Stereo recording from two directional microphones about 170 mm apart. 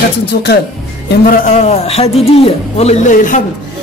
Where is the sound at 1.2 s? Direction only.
50° left (ahead or behind).